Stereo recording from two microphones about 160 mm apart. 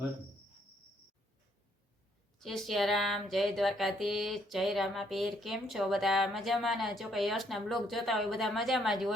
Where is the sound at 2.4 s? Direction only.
Centre (ahead or behind).